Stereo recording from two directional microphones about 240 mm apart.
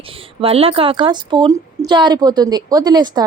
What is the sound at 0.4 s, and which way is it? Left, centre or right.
A woman's voice, right.